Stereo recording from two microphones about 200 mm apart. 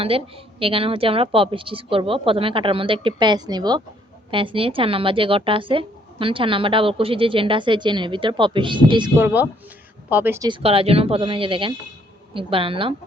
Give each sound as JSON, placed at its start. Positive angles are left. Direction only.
{"t": 0.0, "sound": "speech", "side_deg": -30}
{"t": 9.1, "sound": "a woman's voice", "side_deg": -10}
{"t": 10.5, "sound": "speech", "side_deg": -30}